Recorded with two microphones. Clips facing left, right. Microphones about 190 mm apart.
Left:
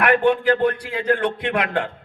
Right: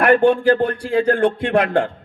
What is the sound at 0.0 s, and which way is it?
A man's voice, 30° right (ahead or behind).